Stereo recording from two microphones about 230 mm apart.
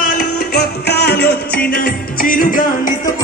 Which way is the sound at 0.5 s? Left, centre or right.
Left.